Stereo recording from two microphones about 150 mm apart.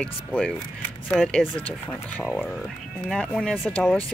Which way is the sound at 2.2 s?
Centre (ahead or behind).